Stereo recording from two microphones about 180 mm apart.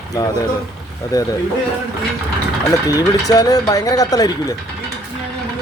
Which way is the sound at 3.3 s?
20° left (ahead or behind).